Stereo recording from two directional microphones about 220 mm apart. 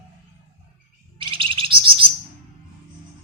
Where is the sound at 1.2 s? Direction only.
25° right (ahead or behind).